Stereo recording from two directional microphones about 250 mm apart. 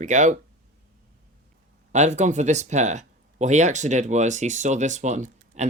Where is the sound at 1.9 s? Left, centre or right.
Right.